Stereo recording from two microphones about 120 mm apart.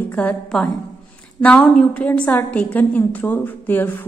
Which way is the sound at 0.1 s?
10° left (ahead or behind).